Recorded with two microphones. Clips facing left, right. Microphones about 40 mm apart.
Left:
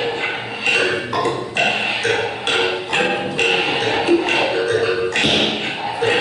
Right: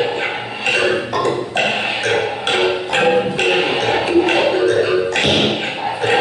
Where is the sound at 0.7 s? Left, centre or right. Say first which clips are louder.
Right 2 dB; centre.